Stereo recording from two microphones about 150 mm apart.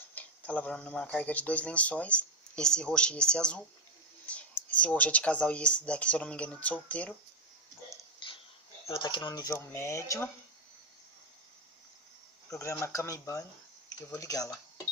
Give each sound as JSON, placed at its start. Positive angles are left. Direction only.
{"t": 0.1, "sound": "speech", "side_deg": 10}
{"t": 8.2, "sound": "a sound", "side_deg": 30}
{"t": 8.9, "sound": "speech", "side_deg": 30}
{"t": 12.4, "sound": "speech", "side_deg": 20}